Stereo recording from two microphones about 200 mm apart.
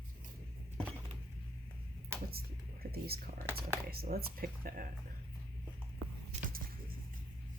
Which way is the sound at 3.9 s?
50° right (ahead or behind).